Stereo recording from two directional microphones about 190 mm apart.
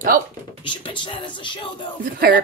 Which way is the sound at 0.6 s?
25° left (ahead or behind).